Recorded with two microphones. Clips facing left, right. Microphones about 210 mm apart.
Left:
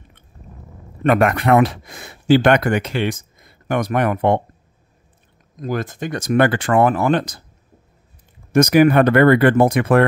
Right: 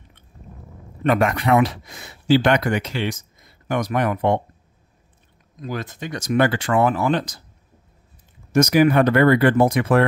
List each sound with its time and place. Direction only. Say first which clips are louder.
1.0 s speech: left 3 dB; 60° left (ahead or behind)
5.6 s speech: left 5 dB; 50° left (ahead or behind)
8.5 s speech: left 3 dB; 55° left (ahead or behind)